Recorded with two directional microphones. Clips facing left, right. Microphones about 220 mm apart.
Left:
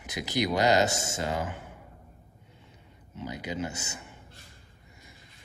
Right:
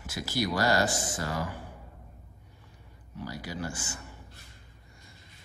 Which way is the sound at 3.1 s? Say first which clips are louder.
Left 3 dB; 20° left (ahead or behind).